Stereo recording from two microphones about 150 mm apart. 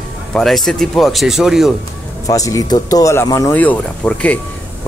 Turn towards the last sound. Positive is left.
turn(degrees=10)  # may be behind; listen again after turning